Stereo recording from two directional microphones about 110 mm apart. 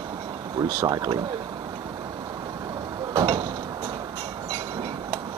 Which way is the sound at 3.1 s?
40° right (ahead or behind).